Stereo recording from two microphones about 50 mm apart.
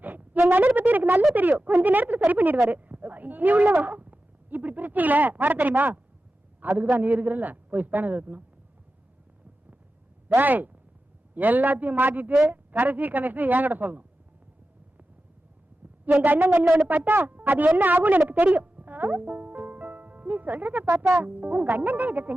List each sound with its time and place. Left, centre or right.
0.0 s a sound: right
1.4 s a man's voice: right
10.2 s a man's voice: right
16.2 s a man's voice: right
18.3 s music: right
21.1 s a man's voice: right